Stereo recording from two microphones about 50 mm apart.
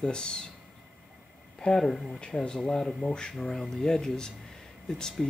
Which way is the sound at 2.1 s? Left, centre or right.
Centre.